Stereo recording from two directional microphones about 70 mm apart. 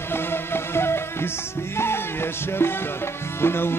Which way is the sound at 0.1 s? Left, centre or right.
Left.